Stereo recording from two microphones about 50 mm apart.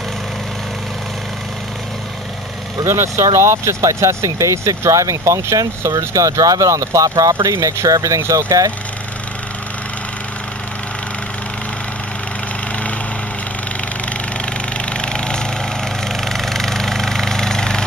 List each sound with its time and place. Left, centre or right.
2.8 s speech: right
14.9 s a sound: centre
16.1 s engine: centre